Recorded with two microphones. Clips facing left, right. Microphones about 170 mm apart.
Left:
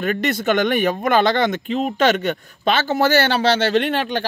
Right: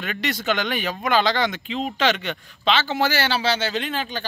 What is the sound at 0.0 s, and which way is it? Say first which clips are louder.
A man's voice: left 7 dB; 50° left (ahead or behind).